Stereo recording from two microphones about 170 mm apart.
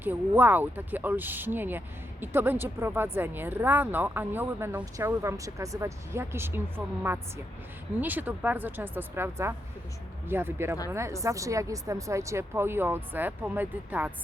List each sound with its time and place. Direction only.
0.0 s speech: 10° right (ahead or behind)